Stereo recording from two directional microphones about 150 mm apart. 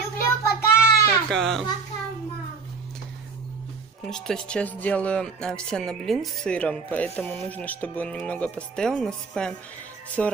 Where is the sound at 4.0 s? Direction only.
5° left (ahead or behind).